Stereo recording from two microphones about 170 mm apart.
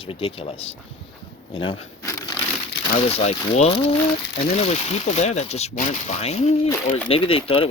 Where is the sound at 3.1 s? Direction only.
40° left (ahead or behind).